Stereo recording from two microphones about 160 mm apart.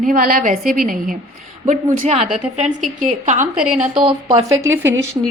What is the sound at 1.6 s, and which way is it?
Speech, 45° right (ahead or behind).